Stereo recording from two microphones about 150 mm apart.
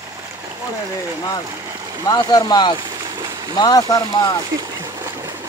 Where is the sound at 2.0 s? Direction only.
25° left (ahead or behind).